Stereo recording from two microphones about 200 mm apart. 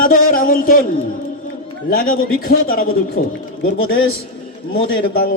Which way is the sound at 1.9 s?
45° left (ahead or behind).